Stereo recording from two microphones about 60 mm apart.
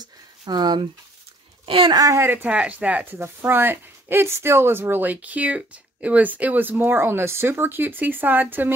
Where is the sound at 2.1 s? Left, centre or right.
Right.